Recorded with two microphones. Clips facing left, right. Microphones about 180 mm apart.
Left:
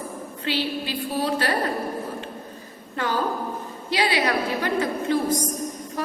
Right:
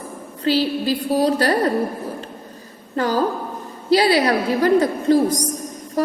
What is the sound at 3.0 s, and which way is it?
A woman's voice, 40° right (ahead or behind).